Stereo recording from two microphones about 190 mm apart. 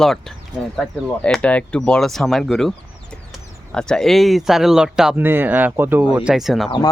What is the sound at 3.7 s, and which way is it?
Speech, 5° left (ahead or behind).